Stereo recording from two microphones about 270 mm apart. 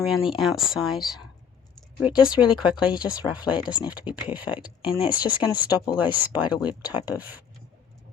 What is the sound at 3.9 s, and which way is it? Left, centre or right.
Speech, centre.